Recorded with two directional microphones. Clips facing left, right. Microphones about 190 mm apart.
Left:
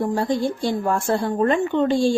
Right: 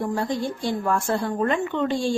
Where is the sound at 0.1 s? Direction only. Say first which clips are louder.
Left 4 dB; 30° left (ahead or behind).